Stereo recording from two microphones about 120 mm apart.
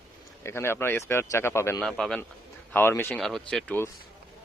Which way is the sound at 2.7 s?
20° left (ahead or behind).